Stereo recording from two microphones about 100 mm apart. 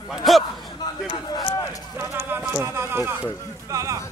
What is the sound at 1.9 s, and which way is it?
Speech, 20° right (ahead or behind).